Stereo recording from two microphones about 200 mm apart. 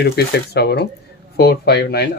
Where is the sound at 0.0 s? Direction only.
55° left (ahead or behind).